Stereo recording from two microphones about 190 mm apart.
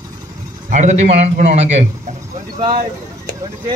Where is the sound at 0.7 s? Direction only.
40° right (ahead or behind).